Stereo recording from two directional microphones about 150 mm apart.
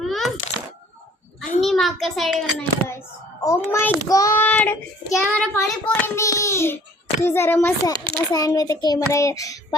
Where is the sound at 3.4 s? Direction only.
20° left (ahead or behind).